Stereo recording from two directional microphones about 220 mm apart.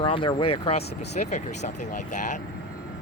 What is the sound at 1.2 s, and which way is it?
Speech, 30° left (ahead or behind).